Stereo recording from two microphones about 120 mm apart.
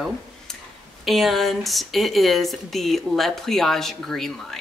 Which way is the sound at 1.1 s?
Centre (ahead or behind).